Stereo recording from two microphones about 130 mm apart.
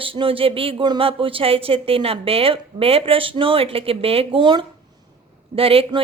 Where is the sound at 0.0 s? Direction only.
45° right (ahead or behind).